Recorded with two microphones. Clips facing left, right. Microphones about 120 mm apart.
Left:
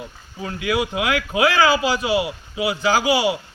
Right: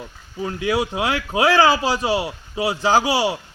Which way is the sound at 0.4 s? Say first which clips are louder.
Right 1 dB; 30° right (ahead or behind).